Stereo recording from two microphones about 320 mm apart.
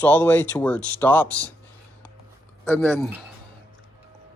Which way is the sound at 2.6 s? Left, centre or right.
Centre.